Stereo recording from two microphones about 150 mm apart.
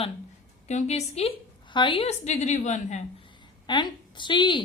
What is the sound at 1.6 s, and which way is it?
A woman's voice, 30° left (ahead or behind).